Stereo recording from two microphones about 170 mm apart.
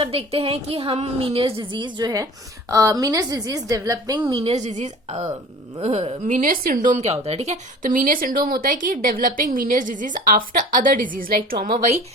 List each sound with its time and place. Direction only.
0.0 s a woman's voice: 35° right (ahead or behind)
4.5 s speech: 45° right (ahead or behind)